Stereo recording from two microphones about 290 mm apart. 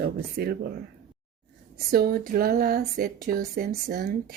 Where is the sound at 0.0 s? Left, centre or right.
Right.